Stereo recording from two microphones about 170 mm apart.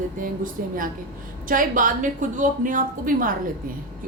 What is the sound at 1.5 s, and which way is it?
A woman's voice, 50° right (ahead or behind).